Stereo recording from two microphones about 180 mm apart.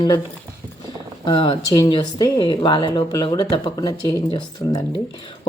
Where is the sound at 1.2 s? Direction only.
25° left (ahead or behind).